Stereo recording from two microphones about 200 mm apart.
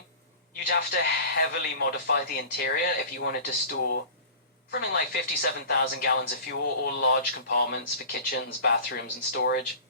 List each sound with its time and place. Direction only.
0.7 s speech: 50° left (ahead or behind)